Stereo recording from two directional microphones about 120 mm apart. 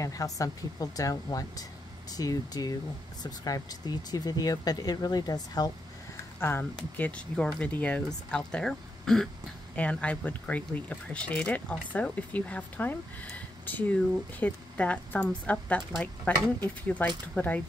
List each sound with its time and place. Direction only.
0.0 s speech: 30° left (ahead or behind)
6.4 s speech: 15° left (ahead or behind)